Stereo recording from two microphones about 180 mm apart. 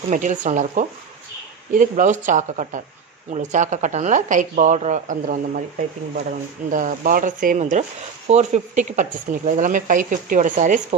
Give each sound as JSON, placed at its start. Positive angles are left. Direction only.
{"t": 0.1, "sound": "speech", "side_deg": -45}
{"t": 6.7, "sound": "speech", "side_deg": -50}